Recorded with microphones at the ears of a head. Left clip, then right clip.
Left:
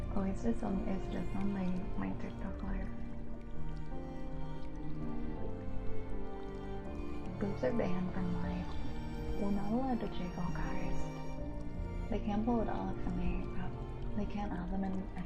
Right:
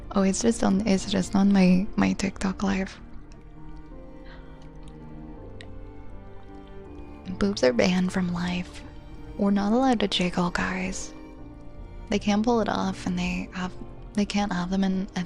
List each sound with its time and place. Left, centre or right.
0.1 s a woman's voice: right
7.3 s a woman's voice: right